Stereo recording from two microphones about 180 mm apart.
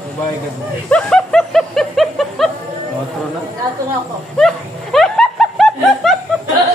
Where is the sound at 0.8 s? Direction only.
5° left (ahead or behind).